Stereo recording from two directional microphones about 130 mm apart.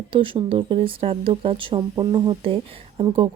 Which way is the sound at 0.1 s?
45° right (ahead or behind).